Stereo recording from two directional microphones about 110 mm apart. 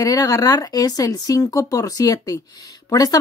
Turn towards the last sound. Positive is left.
turn(degrees=35)  # may be behind; listen again after turning